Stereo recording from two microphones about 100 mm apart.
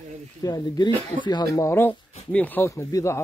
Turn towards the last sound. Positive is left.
turn(degrees=30)  # may be behind; listen again after turning